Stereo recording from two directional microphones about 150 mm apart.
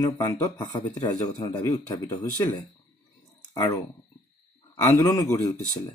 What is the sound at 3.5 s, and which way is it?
A man's voice, 25° left (ahead or behind).